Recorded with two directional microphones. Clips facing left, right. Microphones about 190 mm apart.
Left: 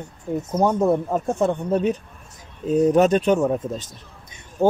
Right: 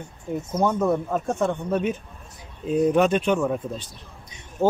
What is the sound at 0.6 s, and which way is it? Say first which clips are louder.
Speech: left 3 dB; 35° left (ahead or behind).